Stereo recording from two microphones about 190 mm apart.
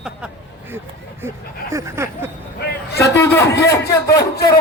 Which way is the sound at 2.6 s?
60° left (ahead or behind).